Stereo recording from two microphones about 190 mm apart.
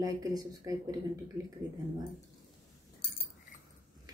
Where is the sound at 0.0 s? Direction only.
20° right (ahead or behind).